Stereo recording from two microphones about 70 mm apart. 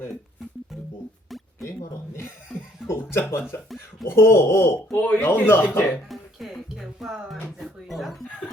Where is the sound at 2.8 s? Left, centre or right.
Left.